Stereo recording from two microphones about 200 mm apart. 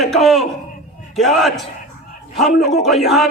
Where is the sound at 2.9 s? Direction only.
Centre (ahead or behind).